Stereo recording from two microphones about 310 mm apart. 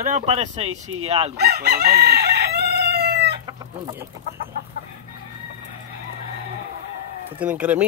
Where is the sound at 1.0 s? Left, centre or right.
Centre.